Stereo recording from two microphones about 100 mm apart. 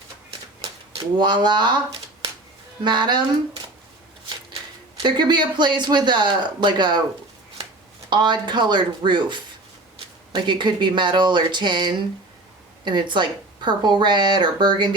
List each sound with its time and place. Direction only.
1.2 s a woman's voice: 50° right (ahead or behind)
2.8 s a woman's voice: 50° right (ahead or behind)
5.0 s a woman's voice: 50° right (ahead or behind)
8.1 s a woman's voice: 50° right (ahead or behind)